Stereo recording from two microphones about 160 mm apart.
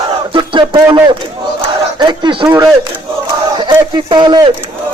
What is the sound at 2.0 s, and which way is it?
Speech, 30° right (ahead or behind).